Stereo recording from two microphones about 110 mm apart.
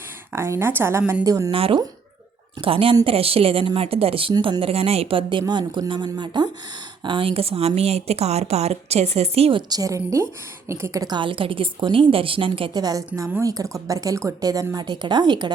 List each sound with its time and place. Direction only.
0.3 s a woman's voice: 25° right (ahead or behind)
1.2 s a woman's voice: 35° right (ahead or behind)
1.5 s a woman's voice: 55° right (ahead or behind)
9.6 s a woman's voice: 35° right (ahead or behind); by 12.7 s 55° right (ahead or behind)
12.7 s a woman's voice: 35° right (ahead or behind)